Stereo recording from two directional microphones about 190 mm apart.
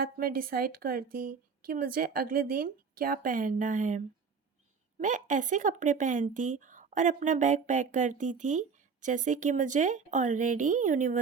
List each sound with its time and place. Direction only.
0.0 s a woman's voice: 50° right (ahead or behind)